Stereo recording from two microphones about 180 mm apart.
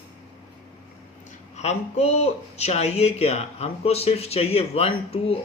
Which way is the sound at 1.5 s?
35° left (ahead or behind).